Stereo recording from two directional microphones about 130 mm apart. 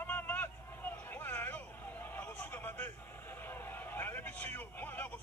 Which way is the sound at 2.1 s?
15° left (ahead or behind).